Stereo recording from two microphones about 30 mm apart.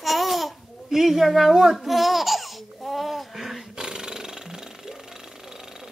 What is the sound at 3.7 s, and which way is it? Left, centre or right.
Jackhammer, right.